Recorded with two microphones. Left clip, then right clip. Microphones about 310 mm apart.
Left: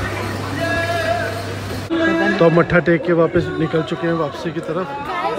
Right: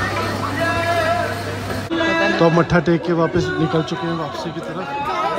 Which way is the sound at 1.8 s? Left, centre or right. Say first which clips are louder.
Left 1 dB; centre.